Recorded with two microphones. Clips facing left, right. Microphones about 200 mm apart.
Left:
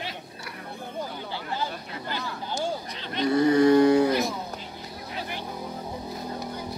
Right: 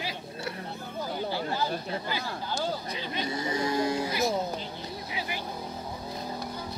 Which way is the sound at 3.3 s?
60° left (ahead or behind).